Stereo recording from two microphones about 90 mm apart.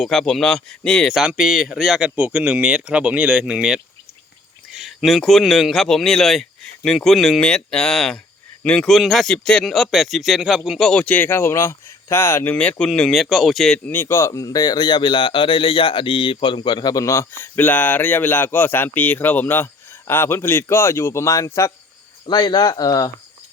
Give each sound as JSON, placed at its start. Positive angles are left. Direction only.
{"t": 0.0, "sound": "a man's voice", "side_deg": 5}
{"t": 1.3, "sound": "a man's voice", "side_deg": -5}
{"t": 12.5, "sound": "a man's voice", "side_deg": 10}
{"t": 13.8, "sound": "speech", "side_deg": 25}
{"t": 16.9, "sound": "speech", "side_deg": 40}
{"t": 22.3, "sound": "speech", "side_deg": 55}